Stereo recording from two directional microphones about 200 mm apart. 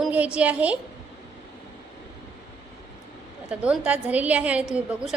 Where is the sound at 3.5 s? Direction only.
5° right (ahead or behind).